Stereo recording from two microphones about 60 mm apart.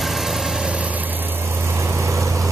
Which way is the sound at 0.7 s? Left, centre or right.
Right.